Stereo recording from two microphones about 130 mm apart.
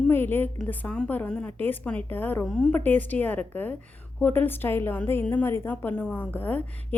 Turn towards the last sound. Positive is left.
turn(degrees=10)  # may be behind; listen again after turning